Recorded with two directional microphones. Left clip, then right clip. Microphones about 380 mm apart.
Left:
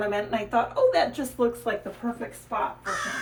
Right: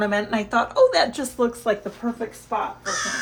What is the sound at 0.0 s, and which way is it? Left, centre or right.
A woman's voice, right.